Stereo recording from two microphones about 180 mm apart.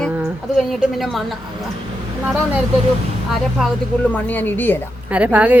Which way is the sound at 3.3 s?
5° left (ahead or behind).